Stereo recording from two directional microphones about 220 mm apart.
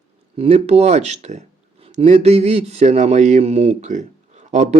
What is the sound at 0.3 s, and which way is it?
Speech, 30° right (ahead or behind).